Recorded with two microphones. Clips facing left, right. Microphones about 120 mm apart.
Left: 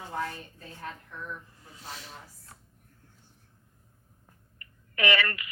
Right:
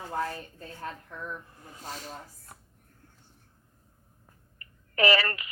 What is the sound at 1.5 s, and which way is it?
Speech, 55° right (ahead or behind).